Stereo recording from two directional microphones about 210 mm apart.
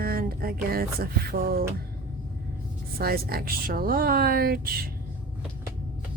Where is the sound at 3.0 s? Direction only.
45° right (ahead or behind).